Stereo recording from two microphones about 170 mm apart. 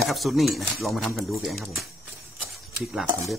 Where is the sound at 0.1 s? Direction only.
Centre (ahead or behind).